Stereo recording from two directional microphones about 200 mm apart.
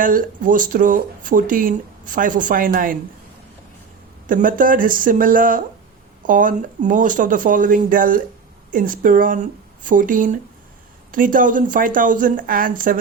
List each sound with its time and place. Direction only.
0.0 s speech: 45° right (ahead or behind)
4.3 s speech: 45° right (ahead or behind)